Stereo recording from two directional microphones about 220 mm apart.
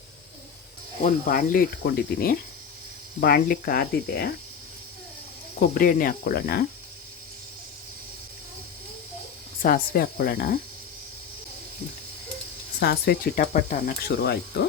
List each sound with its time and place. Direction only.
1.0 s speech: 40° left (ahead or behind)
5.5 s speech: 40° left (ahead or behind)
9.6 s speech: 40° left (ahead or behind)
12.8 s speech: 45° left (ahead or behind)